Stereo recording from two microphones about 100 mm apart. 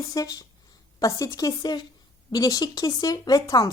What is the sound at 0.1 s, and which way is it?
Speech, 35° left (ahead or behind).